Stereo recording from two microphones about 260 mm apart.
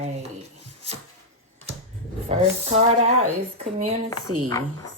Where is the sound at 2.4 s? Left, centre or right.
Right.